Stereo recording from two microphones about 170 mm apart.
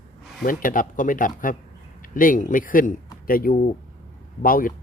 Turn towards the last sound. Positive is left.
turn(degrees=55)  # may be behind; listen again after turning